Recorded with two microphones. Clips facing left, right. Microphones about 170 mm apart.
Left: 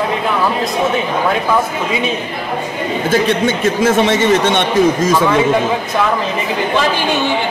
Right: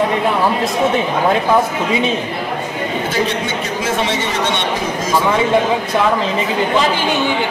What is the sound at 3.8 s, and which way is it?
Speech, 55° left (ahead or behind).